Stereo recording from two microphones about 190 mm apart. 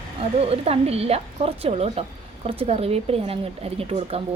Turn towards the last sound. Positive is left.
turn(degrees=-30)  # may be behind; listen again after turning